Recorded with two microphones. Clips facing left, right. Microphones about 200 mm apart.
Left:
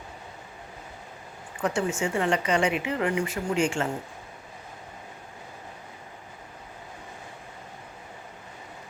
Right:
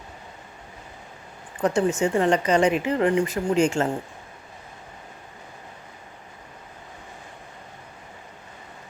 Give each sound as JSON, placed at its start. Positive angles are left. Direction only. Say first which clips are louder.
{"t": 1.6, "sound": "a woman's voice", "louder": "right 5 dB", "side_deg": -40}